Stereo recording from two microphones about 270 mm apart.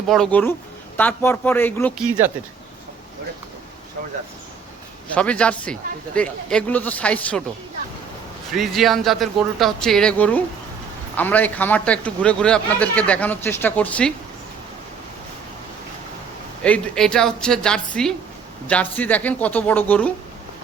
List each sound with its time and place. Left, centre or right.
0.1 s a man's voice: centre
2.0 s speech: centre
5.1 s a man's voice: centre
8.5 s a man's voice: centre
16.6 s a man's voice: centre